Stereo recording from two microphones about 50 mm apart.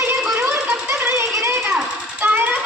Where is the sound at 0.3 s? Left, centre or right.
Right.